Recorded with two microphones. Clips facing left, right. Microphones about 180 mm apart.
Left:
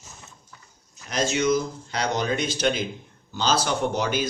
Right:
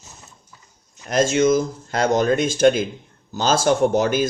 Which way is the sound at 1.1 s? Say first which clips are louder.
Right 6 dB; 50° right (ahead or behind).